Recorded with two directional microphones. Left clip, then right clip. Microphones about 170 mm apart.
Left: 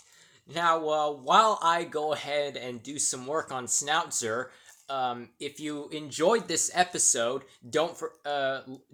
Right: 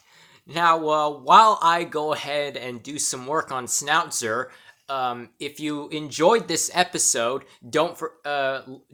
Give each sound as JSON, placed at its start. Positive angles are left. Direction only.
{"t": 0.4, "sound": "speech", "side_deg": -20}